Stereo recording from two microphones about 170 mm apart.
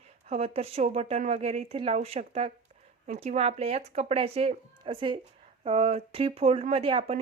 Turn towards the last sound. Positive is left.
turn(degrees=-35)  # may be behind; listen again after turning